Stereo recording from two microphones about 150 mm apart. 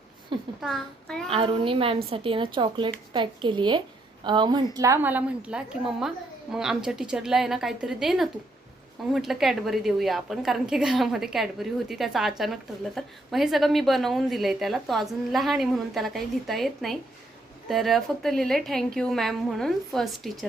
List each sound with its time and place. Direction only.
0.6 s a woman's voice: centre (ahead or behind)
1.3 s a woman's voice: 35° right (ahead or behind); by 20.4 s centre (ahead or behind)